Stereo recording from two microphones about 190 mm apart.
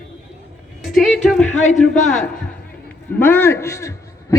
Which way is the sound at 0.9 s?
Centre (ahead or behind).